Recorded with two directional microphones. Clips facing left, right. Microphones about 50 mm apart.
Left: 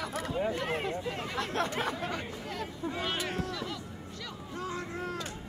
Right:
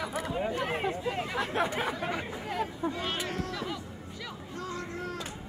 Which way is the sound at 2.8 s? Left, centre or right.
Centre.